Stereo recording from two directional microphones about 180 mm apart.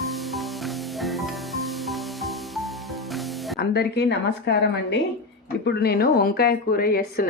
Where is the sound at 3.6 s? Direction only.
65° left (ahead or behind).